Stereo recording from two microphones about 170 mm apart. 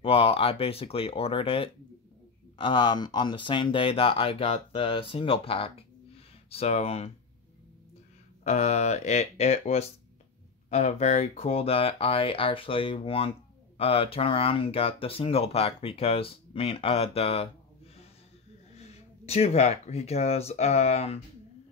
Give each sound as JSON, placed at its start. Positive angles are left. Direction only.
{"t": 0.0, "sound": "speech", "side_deg": 35}
{"t": 8.5, "sound": "speech", "side_deg": 40}
{"t": 18.8, "sound": "speech", "side_deg": 40}